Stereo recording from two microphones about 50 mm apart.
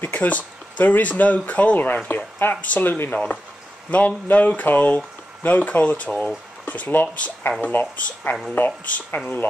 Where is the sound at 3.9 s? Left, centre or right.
Left.